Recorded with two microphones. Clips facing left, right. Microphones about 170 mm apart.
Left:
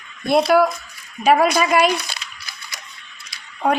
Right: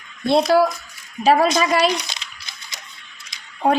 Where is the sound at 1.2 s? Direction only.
30° right (ahead or behind).